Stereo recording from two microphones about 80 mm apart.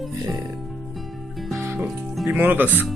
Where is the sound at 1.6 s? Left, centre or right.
Right.